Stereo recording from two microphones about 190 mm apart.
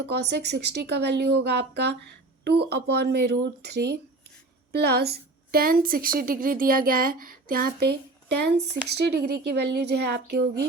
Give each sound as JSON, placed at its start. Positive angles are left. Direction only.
{"t": 0.0, "sound": "a woman's voice", "side_deg": -60}